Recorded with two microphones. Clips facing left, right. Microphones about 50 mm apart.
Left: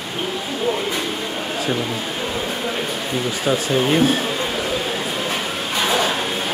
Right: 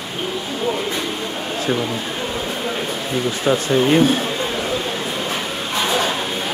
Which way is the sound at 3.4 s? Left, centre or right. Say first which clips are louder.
Right 3 dB; centre.